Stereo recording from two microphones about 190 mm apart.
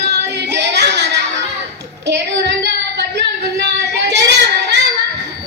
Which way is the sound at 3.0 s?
65° right (ahead or behind).